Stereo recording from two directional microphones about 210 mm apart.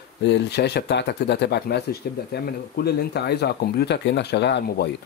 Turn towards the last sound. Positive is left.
turn(degrees=50)  # may be behind; listen again after turning